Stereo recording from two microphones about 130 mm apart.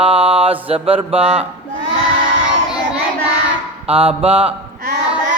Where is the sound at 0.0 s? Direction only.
45° right (ahead or behind).